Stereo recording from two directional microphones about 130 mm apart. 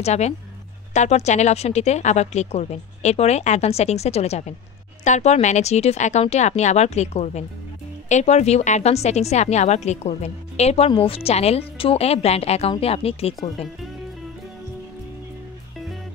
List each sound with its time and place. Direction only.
0.0 s a woman's voice: 55° left (ahead or behind)
10.9 s a woman's voice: 45° left (ahead or behind)